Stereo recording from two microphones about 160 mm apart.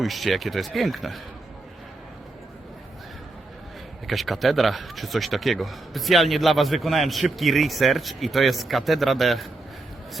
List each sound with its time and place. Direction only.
0.0 s speech: centre (ahead or behind)
4.0 s speech: centre (ahead or behind)